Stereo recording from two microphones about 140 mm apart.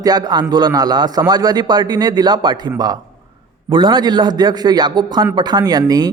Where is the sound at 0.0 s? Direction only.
30° right (ahead or behind).